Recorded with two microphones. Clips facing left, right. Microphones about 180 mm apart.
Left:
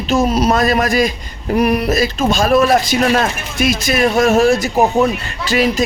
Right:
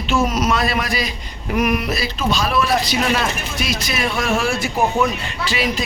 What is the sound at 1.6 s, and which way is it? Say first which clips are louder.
A man's voice: left 5 dB; 35° left (ahead or behind).